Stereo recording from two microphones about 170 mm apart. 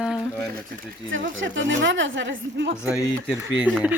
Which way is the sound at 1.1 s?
90° right.